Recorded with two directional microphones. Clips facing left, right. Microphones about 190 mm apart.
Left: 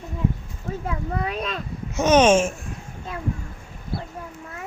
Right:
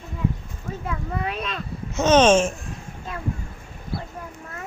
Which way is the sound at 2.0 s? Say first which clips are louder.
Even; 10° left (ahead or behind).